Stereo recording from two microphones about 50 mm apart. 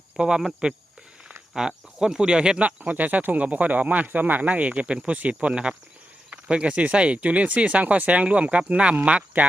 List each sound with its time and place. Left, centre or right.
0.2 s speech: centre
1.5 s speech: centre
2.6 s speech: right